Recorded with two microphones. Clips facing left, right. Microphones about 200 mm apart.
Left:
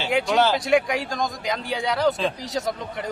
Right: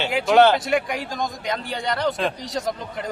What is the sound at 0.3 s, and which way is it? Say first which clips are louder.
Speech: right 8 dB; 60° right (ahead or behind).